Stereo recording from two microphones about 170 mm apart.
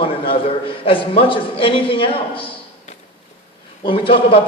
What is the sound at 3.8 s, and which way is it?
Speech, 30° left (ahead or behind).